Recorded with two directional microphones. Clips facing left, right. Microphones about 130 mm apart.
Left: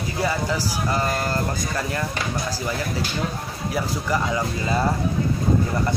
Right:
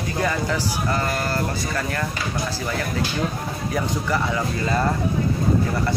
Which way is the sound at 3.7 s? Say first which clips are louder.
Even; 15° left (ahead or behind).